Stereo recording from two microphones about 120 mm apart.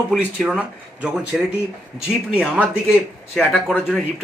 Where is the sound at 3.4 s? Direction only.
5° right (ahead or behind).